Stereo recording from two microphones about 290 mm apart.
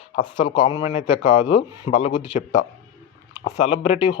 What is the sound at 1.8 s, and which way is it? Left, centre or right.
Speech, centre.